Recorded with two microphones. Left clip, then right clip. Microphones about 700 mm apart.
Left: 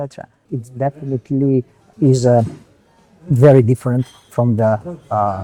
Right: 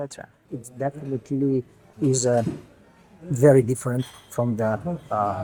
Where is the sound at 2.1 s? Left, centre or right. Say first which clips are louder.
Left 8 dB; left.